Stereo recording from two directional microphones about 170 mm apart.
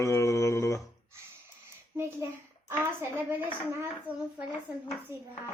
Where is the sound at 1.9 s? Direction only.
15° right (ahead or behind).